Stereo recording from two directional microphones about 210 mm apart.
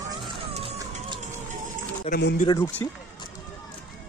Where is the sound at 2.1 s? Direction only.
30° left (ahead or behind).